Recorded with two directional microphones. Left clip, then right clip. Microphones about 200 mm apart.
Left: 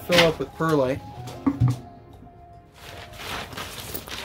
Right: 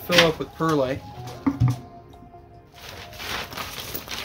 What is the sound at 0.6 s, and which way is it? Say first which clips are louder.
Speech: left 1 dB; 25° left (ahead or behind).